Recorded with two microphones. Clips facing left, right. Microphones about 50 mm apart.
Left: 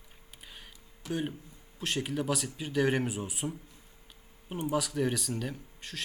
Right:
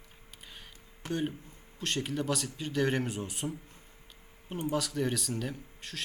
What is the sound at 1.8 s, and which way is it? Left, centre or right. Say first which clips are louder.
Speech: left 1 dB; centre.